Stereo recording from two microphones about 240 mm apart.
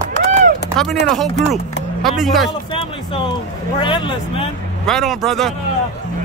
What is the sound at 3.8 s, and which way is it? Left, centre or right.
Speech, centre.